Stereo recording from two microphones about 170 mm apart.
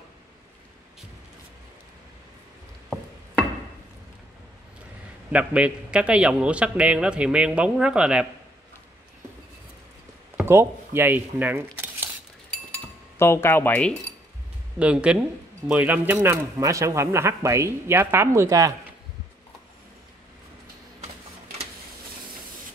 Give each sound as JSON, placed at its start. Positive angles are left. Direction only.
{"t": 5.3, "sound": "a man's voice", "side_deg": -5}
{"t": 10.3, "sound": "speech", "side_deg": -15}
{"t": 12.7, "sound": "cutlery", "side_deg": 10}
{"t": 14.8, "sound": "a man's voice", "side_deg": -5}